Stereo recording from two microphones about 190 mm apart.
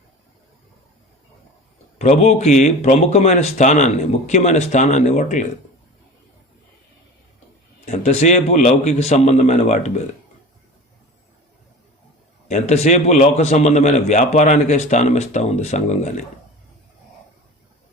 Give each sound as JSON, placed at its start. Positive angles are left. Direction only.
{"t": 2.0, "sound": "a man's voice", "side_deg": 35}
{"t": 7.9, "sound": "a man's voice", "side_deg": 35}
{"t": 12.5, "sound": "a man's voice", "side_deg": 35}